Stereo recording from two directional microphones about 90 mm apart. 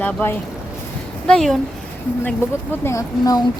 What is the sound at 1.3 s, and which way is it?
Speech, 5° left (ahead or behind).